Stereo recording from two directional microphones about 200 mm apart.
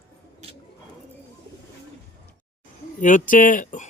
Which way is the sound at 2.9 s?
40° left (ahead or behind).